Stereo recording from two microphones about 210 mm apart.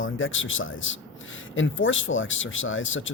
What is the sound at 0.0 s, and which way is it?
Speech, 70° left (ahead or behind).